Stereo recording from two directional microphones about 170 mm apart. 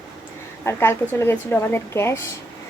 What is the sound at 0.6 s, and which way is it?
A woman's voice, 15° left (ahead or behind).